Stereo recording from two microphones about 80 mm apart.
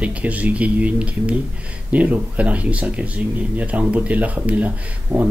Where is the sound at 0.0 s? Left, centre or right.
Centre.